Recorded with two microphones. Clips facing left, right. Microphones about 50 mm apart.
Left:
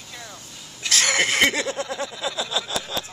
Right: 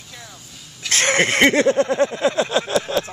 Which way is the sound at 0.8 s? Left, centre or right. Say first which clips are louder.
Right 3 dB; right.